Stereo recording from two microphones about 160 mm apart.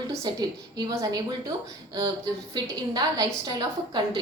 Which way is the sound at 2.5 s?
25° right (ahead or behind).